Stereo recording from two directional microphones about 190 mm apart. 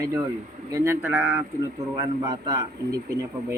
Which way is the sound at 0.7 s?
15° right (ahead or behind).